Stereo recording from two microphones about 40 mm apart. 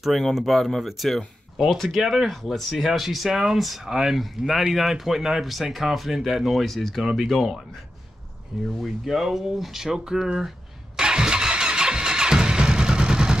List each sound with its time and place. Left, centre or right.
0.3 s speech: centre
8.5 s speech: centre
8.8 s speech: centre
11.0 s vehicle: centre